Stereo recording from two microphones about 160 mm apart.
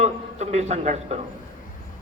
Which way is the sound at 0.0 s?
45° right (ahead or behind).